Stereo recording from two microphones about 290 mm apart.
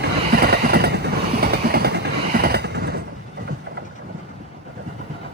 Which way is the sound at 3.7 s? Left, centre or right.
Right.